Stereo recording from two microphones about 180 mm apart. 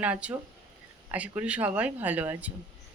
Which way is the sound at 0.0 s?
5° right (ahead or behind).